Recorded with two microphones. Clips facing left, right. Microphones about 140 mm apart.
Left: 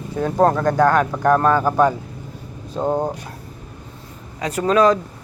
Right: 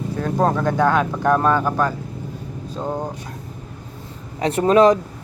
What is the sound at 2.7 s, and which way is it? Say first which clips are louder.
Speech: left 5 dB; 20° left (ahead or behind).